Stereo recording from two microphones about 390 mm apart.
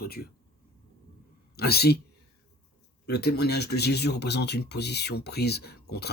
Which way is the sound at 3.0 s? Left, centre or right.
Left.